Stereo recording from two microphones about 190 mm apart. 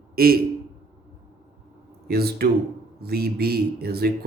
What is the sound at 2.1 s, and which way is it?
Speech, 55° right (ahead or behind).